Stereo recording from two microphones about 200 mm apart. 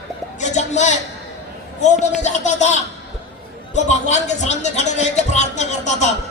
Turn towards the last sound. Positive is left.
turn(degrees=35)  # may be behind; listen again after turning